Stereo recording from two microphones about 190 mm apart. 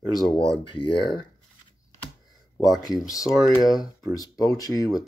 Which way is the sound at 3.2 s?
Centre (ahead or behind).